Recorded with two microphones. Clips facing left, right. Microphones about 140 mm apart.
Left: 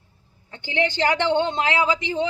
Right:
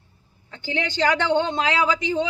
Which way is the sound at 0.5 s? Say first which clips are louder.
Left 3 dB; 20° left (ahead or behind).